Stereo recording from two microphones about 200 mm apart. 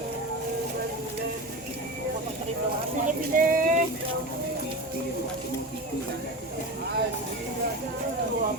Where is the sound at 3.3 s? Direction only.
45° right (ahead or behind).